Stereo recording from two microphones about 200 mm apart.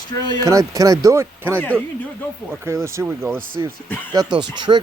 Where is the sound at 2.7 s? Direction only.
15° right (ahead or behind).